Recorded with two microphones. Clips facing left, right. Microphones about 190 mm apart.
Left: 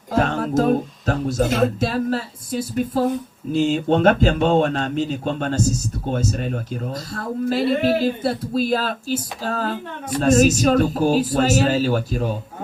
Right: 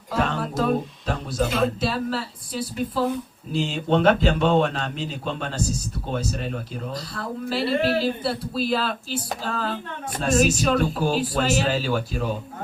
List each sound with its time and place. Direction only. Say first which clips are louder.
0.1 s speech: left 5 dB; 45° left (ahead or behind)